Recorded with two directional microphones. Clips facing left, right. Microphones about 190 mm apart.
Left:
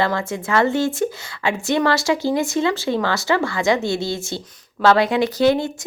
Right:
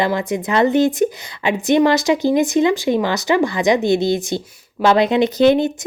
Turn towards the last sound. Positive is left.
turn(degrees=-20)  # may be behind; listen again after turning